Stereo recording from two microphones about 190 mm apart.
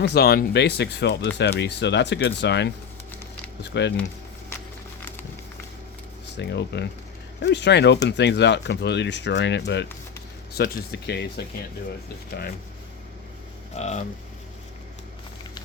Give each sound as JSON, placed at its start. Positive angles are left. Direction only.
{"t": 0.0, "sound": "speech", "side_deg": 60}
{"t": 6.3, "sound": "speech", "side_deg": 65}
{"t": 13.7, "sound": "speech", "side_deg": 35}